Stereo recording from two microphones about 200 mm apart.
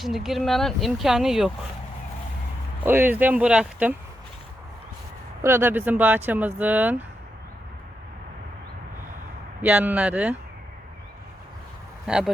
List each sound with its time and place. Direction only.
0.0 s speech: centre (ahead or behind)
2.8 s speech: 10° right (ahead or behind)
5.4 s speech: 10° right (ahead or behind)
9.6 s speech: 5° right (ahead or behind)
12.0 s speech: 5° right (ahead or behind)